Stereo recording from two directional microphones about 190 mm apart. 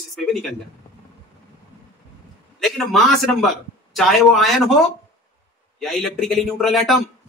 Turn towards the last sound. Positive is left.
turn(degrees=0)  # may be behind; listen again after turning